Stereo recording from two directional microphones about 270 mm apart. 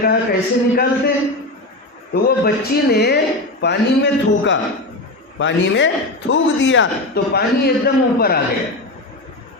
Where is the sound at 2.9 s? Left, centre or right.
Left.